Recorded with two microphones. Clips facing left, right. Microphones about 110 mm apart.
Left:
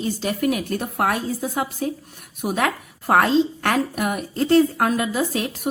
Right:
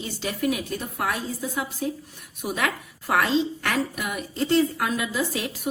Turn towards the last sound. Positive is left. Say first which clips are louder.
# left 4 dB
turn(degrees=45)  # may be behind; listen again after turning